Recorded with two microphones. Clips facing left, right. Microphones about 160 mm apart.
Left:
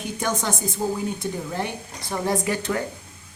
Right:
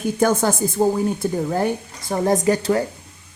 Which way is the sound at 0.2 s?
50° right (ahead or behind).